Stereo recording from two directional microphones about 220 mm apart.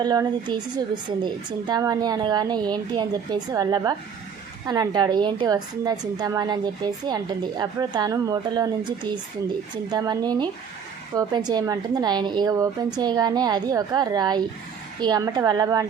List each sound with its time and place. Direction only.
0.0 s a woman's voice: 20° right (ahead or behind)
9.9 s a woman's voice: 20° right (ahead or behind)